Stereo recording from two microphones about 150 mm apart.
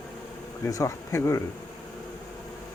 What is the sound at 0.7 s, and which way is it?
Speech, 20° left (ahead or behind).